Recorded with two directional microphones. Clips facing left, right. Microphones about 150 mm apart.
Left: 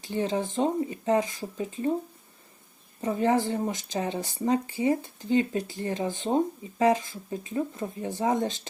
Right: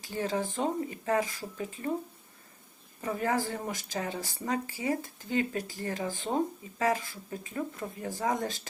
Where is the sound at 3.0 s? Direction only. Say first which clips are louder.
Left 6 dB; 25° left (ahead or behind).